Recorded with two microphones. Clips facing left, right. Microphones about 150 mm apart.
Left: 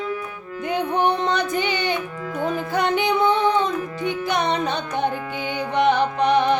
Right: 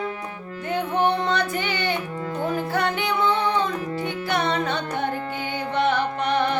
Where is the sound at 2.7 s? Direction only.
15° left (ahead or behind).